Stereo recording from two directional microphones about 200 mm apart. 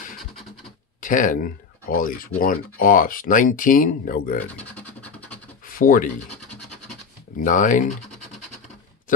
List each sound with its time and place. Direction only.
1.0 s speech: 40° left (ahead or behind)
4.4 s scratch: 10° left (ahead or behind)
5.7 s speech: 45° left (ahead or behind)
7.3 s speech: 40° left (ahead or behind)